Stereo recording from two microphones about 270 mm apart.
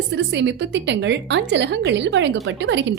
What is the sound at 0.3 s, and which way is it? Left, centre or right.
A woman's voice, right.